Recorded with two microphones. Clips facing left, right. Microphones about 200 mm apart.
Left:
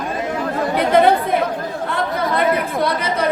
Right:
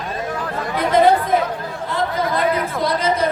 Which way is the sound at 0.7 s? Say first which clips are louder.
Left 1 dB; 60° left (ahead or behind).